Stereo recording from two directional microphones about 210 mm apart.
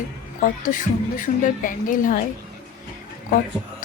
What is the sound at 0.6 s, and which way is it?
Speech, 40° left (ahead or behind).